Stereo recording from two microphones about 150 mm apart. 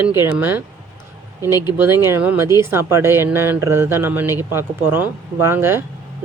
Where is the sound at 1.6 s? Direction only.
15° right (ahead or behind).